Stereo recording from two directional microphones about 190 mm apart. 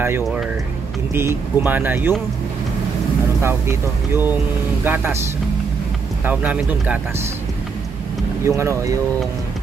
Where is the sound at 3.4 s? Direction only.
15° right (ahead or behind).